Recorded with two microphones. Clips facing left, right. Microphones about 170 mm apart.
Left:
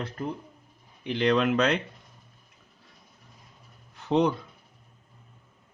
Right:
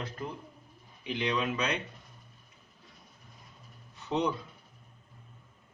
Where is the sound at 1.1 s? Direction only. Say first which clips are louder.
Left 9 dB; 75° left (ahead or behind).